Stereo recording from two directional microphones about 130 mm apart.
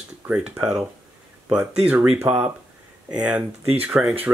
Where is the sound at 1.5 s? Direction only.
10° right (ahead or behind).